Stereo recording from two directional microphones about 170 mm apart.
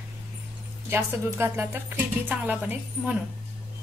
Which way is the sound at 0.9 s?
15° right (ahead or behind).